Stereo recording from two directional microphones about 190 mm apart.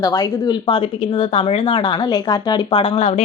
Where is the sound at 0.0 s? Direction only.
20° left (ahead or behind).